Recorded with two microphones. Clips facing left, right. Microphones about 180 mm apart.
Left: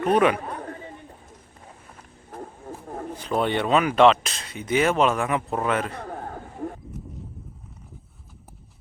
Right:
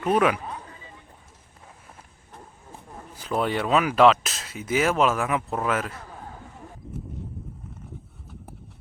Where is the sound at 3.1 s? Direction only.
5° right (ahead or behind).